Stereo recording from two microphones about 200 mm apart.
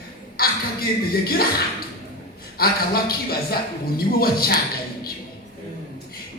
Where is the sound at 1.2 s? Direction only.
50° left (ahead or behind).